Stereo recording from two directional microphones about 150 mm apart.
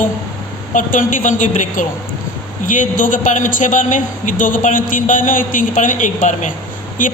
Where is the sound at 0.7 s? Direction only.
60° left (ahead or behind).